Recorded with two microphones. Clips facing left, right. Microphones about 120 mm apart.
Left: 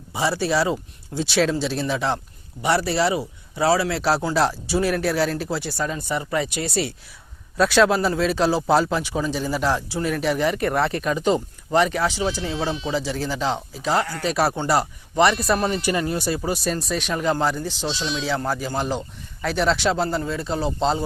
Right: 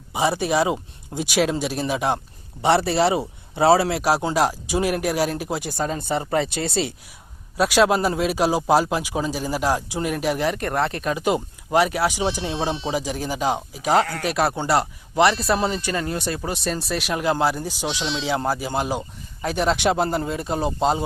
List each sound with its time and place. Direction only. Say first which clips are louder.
0.1 s a man's voice: right 1 dB; 20° right (ahead or behind)
4.0 s speech: even; 15° right (ahead or behind)
5.8 s speech: right 2 dB; 30° right (ahead or behind)
7.5 s speech: even; 10° right (ahead or behind)
12.3 s speech: right 1 dB; 25° right (ahead or behind)
12.9 s speech: even; 15° right (ahead or behind)
14.3 s a man's voice: even; centre (ahead or behind)
15.7 s speech: left 2 dB; 10° left (ahead or behind); by 19.0 s 10° right (ahead or behind)
19.5 s speech: even; 45° right (ahead or behind)
20.6 s speech: right 1 dB; 15° right (ahead or behind)